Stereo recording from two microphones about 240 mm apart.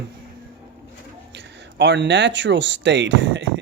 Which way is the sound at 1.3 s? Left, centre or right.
Right.